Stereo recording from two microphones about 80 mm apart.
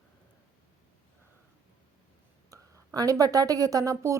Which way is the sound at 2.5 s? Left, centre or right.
Right.